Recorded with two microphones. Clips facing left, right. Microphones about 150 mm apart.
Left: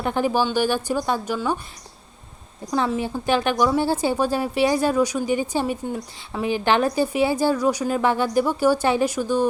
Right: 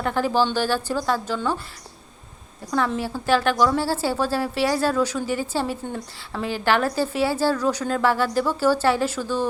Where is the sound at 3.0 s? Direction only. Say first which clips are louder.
Even; 20° left (ahead or behind).